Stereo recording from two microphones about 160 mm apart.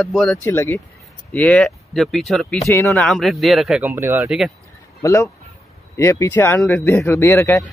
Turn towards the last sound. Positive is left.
turn(degrees=15)  # may be behind; listen again after turning